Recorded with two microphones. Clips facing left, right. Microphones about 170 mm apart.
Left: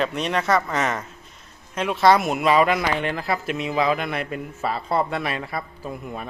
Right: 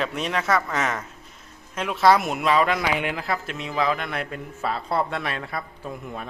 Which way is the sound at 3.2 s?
5° left (ahead or behind).